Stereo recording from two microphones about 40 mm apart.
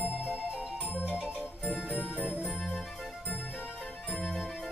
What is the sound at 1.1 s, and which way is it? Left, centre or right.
Music, centre.